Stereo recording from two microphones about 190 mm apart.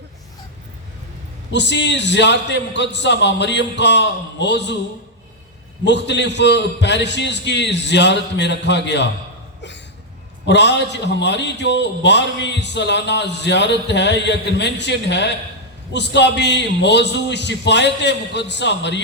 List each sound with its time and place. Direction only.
1.5 s a man's voice: 65° left (ahead or behind)
5.8 s a man's voice: 65° left (ahead or behind)
10.4 s a man's voice: 65° left (ahead or behind)